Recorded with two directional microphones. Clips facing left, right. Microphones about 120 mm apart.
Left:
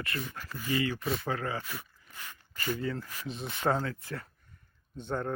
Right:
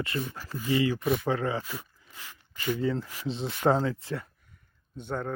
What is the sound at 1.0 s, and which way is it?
Speech, 5° right (ahead or behind).